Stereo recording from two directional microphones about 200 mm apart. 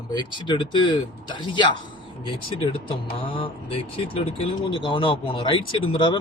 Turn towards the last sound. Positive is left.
turn(degrees=25)  # may be behind; listen again after turning